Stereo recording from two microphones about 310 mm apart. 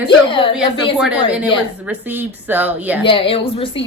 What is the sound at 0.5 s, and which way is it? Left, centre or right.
A woman's voice, centre.